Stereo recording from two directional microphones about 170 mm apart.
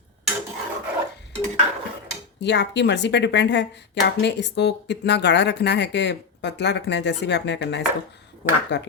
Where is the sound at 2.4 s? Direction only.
90° left.